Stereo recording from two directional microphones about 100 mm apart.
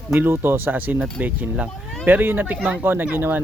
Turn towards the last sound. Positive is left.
turn(degrees=-20)  # may be behind; listen again after turning